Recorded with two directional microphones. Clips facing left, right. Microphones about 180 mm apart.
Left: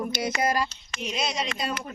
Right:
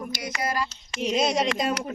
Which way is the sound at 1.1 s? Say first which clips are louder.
Right 7 dB; 50° right (ahead or behind).